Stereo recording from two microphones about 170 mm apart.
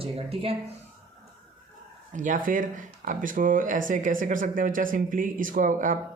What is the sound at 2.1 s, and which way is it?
Speech, 50° right (ahead or behind).